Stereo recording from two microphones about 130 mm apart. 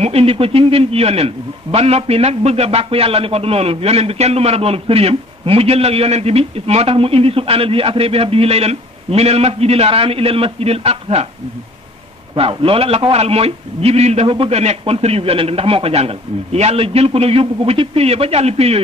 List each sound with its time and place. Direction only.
0.0 s a man's voice: 50° right (ahead or behind)
12.4 s a man's voice: 45° right (ahead or behind)